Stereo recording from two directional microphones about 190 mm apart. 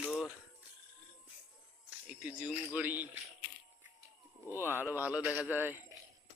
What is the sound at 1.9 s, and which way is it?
A man's voice, 5° right (ahead or behind).